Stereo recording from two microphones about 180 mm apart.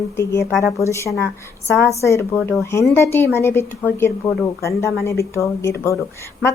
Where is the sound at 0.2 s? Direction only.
15° left (ahead or behind).